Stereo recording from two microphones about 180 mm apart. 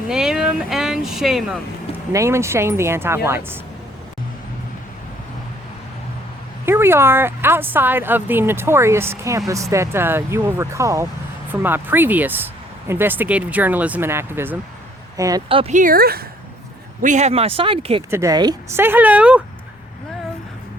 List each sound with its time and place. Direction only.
0.1 s speech: 5° right (ahead or behind)
2.1 s speech: 15° right (ahead or behind)
6.7 s speech: 15° right (ahead or behind)
15.4 s speech: 30° right (ahead or behind)
15.7 s speech: 50° right (ahead or behind)
17.0 s speech: 40° right (ahead or behind)
18.1 s speech: 15° right (ahead or behind)
18.8 s speech: 10° right (ahead or behind)